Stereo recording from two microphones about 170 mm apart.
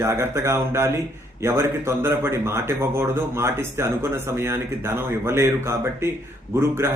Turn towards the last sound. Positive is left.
turn(degrees=-15)  # may be behind; listen again after turning